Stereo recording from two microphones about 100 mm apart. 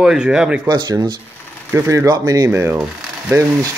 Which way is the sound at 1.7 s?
30° right (ahead or behind).